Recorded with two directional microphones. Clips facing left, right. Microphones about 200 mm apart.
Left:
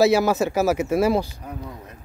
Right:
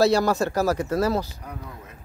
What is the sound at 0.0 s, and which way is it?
Speech, 5° left (ahead or behind).